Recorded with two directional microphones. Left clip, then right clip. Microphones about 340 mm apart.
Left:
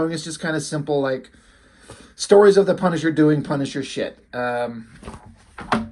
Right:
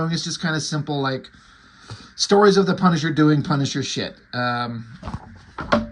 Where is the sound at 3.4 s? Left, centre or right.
Centre.